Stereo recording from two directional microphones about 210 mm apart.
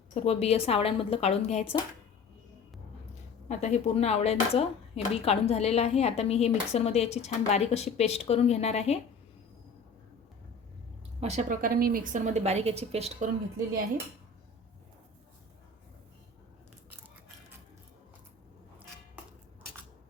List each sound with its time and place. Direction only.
0.1 s a woman's voice: 30° left (ahead or behind)
3.5 s speech: 35° left (ahead or behind)
11.2 s a woman's voice: 35° right (ahead or behind)